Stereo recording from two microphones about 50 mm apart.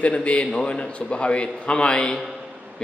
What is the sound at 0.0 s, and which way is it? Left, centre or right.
A man's voice, left.